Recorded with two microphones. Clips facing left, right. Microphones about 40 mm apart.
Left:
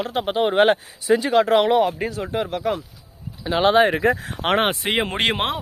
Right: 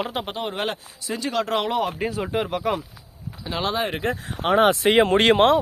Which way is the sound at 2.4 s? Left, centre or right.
Centre.